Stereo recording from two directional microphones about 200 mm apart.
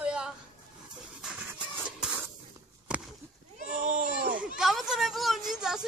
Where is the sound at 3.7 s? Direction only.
40° right (ahead or behind).